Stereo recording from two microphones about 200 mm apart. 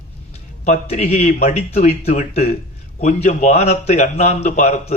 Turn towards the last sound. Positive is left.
turn(degrees=35)  # may be behind; listen again after turning